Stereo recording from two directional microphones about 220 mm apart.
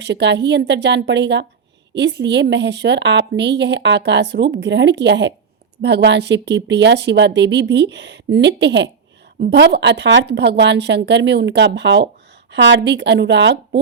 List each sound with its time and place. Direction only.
0.0 s speech: 50° right (ahead or behind)